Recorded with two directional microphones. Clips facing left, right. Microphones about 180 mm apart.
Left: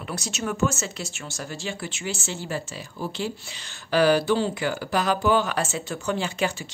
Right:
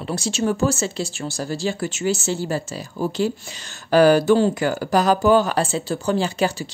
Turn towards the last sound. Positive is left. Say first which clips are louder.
# right 5 dB
turn(degrees=-35)  # may be behind; listen again after turning